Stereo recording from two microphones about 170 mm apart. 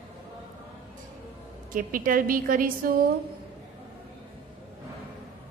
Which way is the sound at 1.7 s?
55° right (ahead or behind).